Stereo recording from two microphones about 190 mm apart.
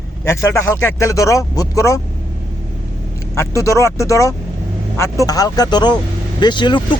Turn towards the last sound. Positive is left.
turn(degrees=25)  # may be behind; listen again after turning